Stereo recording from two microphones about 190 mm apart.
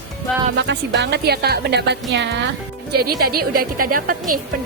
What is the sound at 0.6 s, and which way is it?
A woman's voice, 65° right (ahead or behind).